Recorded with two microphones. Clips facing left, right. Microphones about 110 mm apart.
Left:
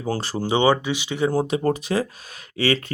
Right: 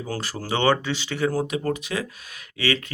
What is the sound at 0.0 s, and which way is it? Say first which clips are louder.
Speech: left 5 dB; 30° left (ahead or behind).